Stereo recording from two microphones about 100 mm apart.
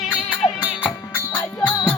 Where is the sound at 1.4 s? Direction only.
30° left (ahead or behind).